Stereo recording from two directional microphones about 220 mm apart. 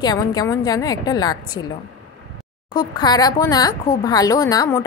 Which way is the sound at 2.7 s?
20° left (ahead or behind).